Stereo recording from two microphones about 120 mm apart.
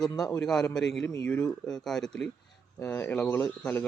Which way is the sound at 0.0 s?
5° left (ahead or behind).